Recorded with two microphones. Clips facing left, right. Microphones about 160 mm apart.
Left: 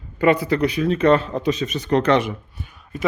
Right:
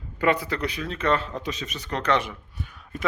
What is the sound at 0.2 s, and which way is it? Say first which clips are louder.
Speech: left 7 dB; 15° left (ahead or behind).